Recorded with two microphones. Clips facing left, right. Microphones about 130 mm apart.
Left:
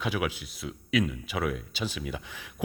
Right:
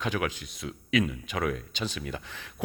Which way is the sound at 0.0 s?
10° left (ahead or behind).